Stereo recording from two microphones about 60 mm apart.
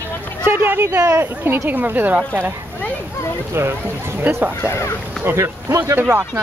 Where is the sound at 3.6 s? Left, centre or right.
Right.